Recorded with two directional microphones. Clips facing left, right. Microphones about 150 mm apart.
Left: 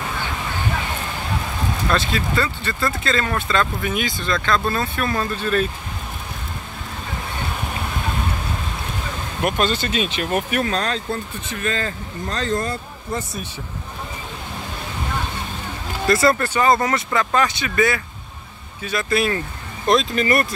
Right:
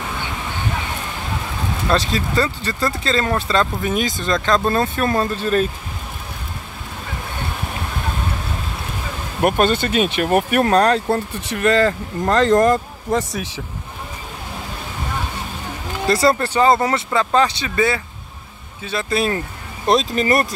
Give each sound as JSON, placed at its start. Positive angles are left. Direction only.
{"t": 2.1, "sound": "speech", "side_deg": -35}
{"t": 9.4, "sound": "speech", "side_deg": -50}
{"t": 16.1, "sound": "speech", "side_deg": -30}
{"t": 19.1, "sound": "speech", "side_deg": -30}